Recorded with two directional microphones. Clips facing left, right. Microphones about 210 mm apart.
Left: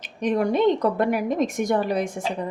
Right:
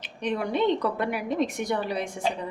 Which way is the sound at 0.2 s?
45° left (ahead or behind).